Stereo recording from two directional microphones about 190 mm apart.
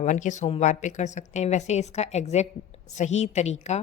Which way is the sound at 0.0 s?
40° left (ahead or behind).